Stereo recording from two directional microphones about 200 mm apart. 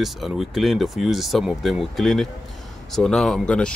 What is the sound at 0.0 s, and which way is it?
Speech, centre (ahead or behind).